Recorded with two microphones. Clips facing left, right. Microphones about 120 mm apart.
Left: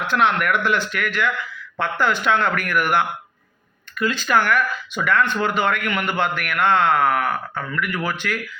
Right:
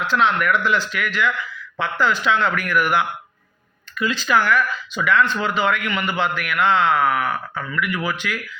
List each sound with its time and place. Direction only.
0.0 s speech: 55° left (ahead or behind)